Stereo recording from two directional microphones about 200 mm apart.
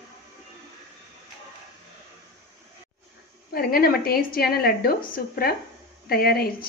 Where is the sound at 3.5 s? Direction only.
50° left (ahead or behind).